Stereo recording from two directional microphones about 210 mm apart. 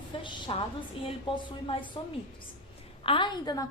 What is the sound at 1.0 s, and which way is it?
Speech, 25° left (ahead or behind).